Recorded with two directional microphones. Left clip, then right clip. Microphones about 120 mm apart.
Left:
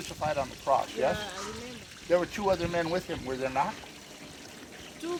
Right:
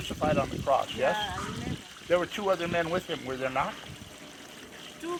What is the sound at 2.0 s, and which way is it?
Speech, 30° right (ahead or behind).